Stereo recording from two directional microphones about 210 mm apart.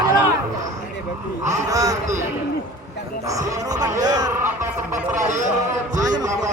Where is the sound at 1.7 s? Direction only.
15° right (ahead or behind).